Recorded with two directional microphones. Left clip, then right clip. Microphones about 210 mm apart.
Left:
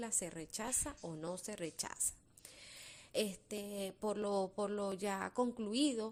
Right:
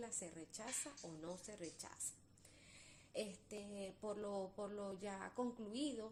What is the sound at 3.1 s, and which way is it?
Speech, 35° left (ahead or behind).